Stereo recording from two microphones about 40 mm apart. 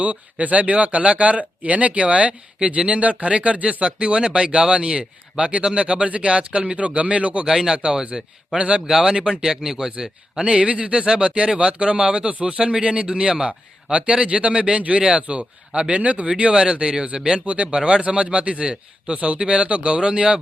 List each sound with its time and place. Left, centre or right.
0.0 s a man's voice: right
7.4 s speech: centre
8.5 s a man's voice: right
8.9 s speech: centre
9.1 s a man's voice: right
10.4 s a man's voice: right
16.4 s a man's voice: right